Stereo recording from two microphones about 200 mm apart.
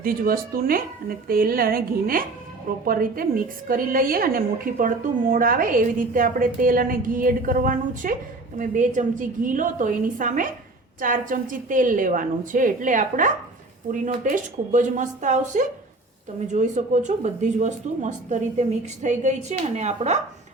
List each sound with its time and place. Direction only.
0.0 s a woman's voice: 45° right (ahead or behind)